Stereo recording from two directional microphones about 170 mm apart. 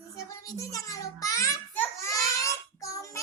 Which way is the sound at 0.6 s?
20° left (ahead or behind).